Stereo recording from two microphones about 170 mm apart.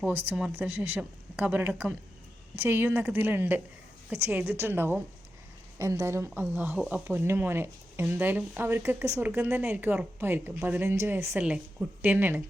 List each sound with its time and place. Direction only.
0.0 s speech: 10° right (ahead or behind)